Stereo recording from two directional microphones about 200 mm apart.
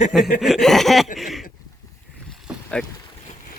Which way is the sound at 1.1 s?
Centre (ahead or behind).